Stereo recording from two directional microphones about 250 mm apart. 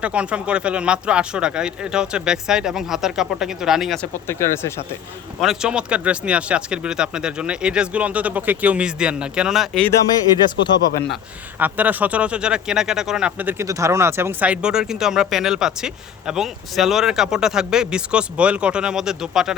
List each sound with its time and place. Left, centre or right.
0.0 s speech: centre
5.4 s speech: centre
10.2 s speech: centre
11.6 s speech: centre